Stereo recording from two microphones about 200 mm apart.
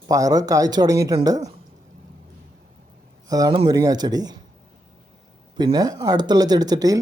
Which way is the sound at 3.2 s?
20° right (ahead or behind).